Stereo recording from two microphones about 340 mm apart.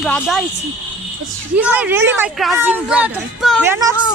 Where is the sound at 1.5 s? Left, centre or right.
Centre.